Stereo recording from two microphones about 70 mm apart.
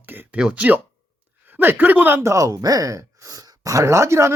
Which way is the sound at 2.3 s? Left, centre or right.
Right.